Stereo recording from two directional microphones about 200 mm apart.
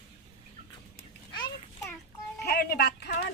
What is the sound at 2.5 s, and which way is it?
Music, 55° left (ahead or behind).